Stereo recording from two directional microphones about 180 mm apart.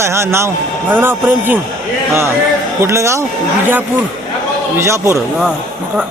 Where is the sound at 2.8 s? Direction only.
15° right (ahead or behind).